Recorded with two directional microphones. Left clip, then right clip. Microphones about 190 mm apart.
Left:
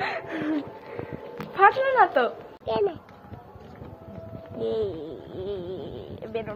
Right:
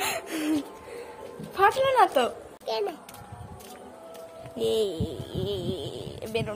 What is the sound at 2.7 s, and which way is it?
Speech, 35° left (ahead or behind).